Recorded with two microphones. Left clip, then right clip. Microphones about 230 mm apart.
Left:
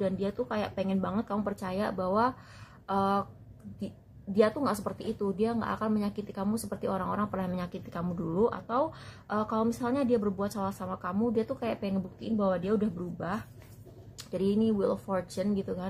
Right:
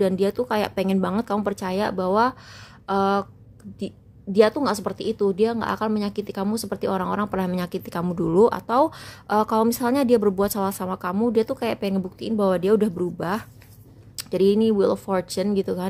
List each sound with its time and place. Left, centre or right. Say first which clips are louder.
0.0 s a woman's voice: right 10 dB; right